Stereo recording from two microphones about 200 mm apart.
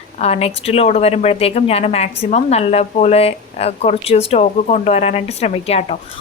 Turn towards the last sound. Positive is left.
turn(degrees=30)  # may be behind; listen again after turning